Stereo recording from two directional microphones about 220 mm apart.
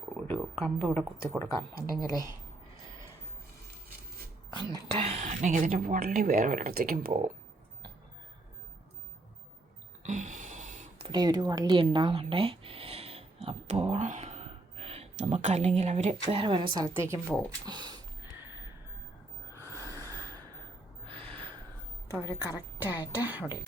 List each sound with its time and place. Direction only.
0.3 s speech: 5° left (ahead or behind)
5.0 s speech: 30° right (ahead or behind)
10.0 s a sound: 35° right (ahead or behind)
16.7 s a woman's voice: 15° right (ahead or behind)
17.7 s sniff: 20° right (ahead or behind)
19.5 s snort: 15° left (ahead or behind)
20.1 s gasp: 15° right (ahead or behind)
22.1 s speech: 15° left (ahead or behind)
22.5 s a woman's voice: 10° right (ahead or behind)